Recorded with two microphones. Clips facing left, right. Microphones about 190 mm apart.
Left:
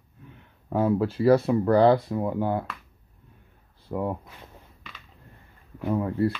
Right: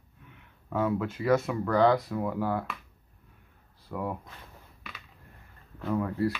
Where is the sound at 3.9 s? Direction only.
25° left (ahead or behind).